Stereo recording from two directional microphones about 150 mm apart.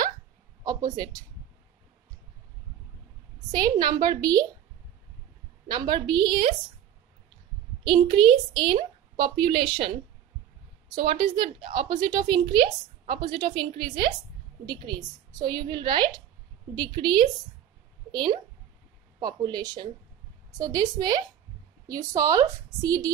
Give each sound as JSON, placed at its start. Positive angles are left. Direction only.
{"t": 0.7, "sound": "speech", "side_deg": -25}
{"t": 3.5, "sound": "a woman's voice", "side_deg": -30}
{"t": 5.7, "sound": "a woman's voice", "side_deg": -30}
{"t": 7.8, "sound": "a woman's voice", "side_deg": -30}
{"t": 11.0, "sound": "a woman's voice", "side_deg": -35}